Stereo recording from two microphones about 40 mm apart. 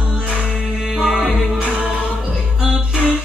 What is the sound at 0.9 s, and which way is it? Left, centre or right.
Music, centre.